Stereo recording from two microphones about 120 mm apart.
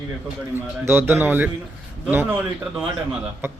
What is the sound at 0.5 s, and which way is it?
A man's voice, 20° right (ahead or behind).